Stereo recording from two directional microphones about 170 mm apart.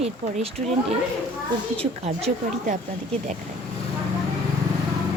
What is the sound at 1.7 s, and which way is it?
A woman's voice, 35° right (ahead or behind).